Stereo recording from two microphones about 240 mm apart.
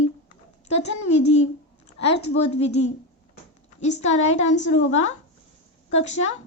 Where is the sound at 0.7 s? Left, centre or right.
Left.